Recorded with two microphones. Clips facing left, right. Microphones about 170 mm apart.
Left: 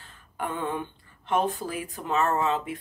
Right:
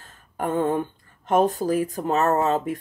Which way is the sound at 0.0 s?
45° right (ahead or behind).